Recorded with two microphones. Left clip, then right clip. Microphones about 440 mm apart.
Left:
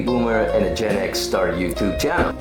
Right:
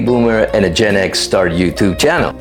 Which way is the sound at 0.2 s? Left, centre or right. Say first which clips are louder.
Right 5 dB; right.